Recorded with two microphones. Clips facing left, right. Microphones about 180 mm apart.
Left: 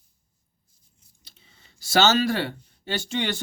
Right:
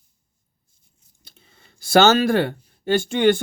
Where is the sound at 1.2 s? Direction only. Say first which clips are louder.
Right 4 dB; 55° right (ahead or behind).